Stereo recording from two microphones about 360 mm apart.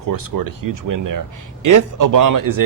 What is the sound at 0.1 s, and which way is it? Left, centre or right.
Speech, right.